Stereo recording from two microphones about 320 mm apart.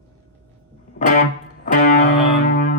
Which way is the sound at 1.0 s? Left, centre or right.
Left.